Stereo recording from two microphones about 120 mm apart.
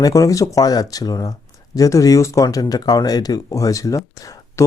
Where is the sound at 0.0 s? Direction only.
25° left (ahead or behind).